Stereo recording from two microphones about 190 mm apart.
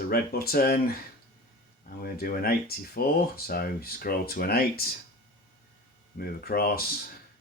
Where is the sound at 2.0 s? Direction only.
50° left (ahead or behind).